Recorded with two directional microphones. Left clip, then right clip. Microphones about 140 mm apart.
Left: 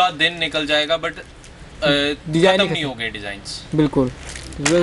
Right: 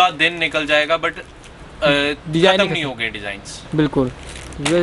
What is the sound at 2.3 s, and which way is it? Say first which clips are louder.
Speech: right 1 dB; 15° left (ahead or behind).